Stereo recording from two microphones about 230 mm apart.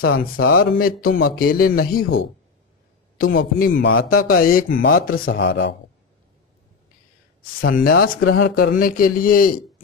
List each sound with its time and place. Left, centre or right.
0.2 s a man's voice: left
3.3 s a man's voice: left
3.7 s a man's voice: left
4.6 s a man's voice: left
7.6 s a man's voice: left